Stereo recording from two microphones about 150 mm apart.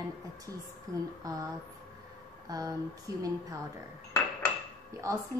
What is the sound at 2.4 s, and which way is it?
Speech, 25° right (ahead or behind).